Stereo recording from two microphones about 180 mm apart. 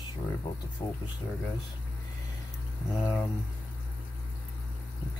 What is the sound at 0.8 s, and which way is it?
Speech, 25° left (ahead or behind).